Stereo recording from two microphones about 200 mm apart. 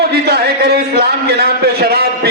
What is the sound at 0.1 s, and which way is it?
A man's voice, 55° right (ahead or behind).